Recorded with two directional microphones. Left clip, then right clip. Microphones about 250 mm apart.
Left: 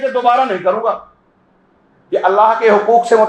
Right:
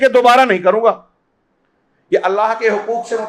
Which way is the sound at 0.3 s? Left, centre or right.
Right.